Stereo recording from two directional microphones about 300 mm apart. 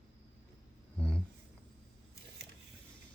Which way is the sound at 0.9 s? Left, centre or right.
Centre.